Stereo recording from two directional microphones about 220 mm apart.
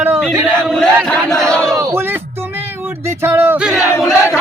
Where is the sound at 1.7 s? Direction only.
15° right (ahead or behind).